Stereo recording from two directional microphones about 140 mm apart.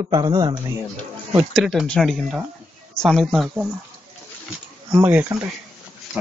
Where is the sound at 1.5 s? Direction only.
5° right (ahead or behind).